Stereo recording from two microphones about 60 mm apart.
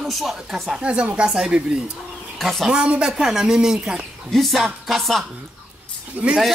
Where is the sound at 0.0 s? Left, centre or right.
Centre.